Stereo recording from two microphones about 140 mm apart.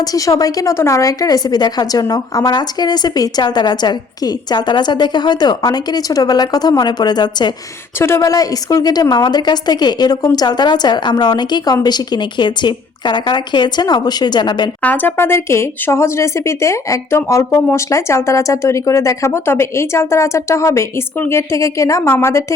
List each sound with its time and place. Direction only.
0.0 s speech: 25° left (ahead or behind)
7.9 s a woman's voice: 20° left (ahead or behind)
14.8 s speech: 10° left (ahead or behind)